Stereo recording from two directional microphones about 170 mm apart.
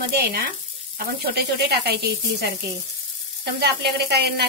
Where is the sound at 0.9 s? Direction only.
65° right (ahead or behind).